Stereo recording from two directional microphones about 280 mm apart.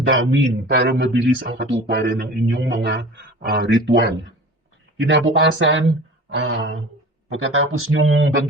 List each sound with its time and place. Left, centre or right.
0.1 s a man's voice: right